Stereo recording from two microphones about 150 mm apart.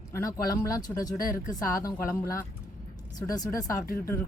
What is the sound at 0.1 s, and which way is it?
Speech, 20° left (ahead or behind).